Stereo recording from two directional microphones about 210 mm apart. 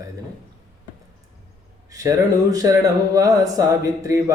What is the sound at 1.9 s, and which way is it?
Speech, 15° right (ahead or behind).